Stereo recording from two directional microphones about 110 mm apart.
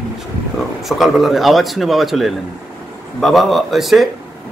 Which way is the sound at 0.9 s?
Centre (ahead or behind).